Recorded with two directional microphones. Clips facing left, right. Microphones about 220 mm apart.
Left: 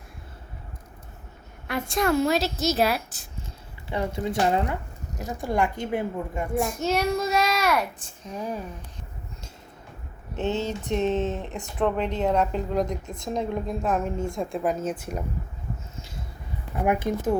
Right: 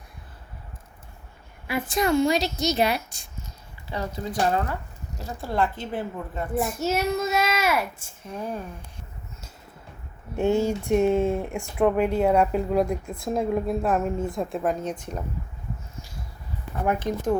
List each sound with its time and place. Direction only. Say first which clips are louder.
1.6 s a child's voice: even; 5° right (ahead or behind)
3.8 s speech: left 3 dB; 25° left (ahead or behind)
6.6 s a child's voice: even; 5° right (ahead or behind)
10.3 s speech: right 5 dB; 15° right (ahead or behind); by 15.2 s 5° left (ahead or behind)
16.7 s speech: left 1 dB; 10° left (ahead or behind)